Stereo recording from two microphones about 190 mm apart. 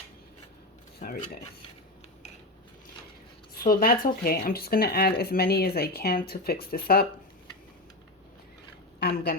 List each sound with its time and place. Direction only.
0.9 s speech: 50° left (ahead or behind)
3.6 s speech: 50° left (ahead or behind)
9.0 s a sound: 55° left (ahead or behind)